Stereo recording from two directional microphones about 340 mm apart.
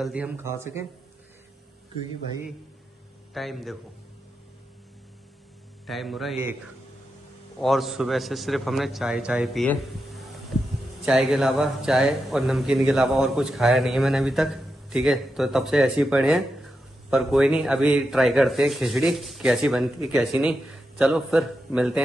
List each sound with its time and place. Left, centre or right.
0.0 s speech: centre
3.3 s a man's voice: centre
5.9 s a man's voice: centre
7.6 s a man's voice: centre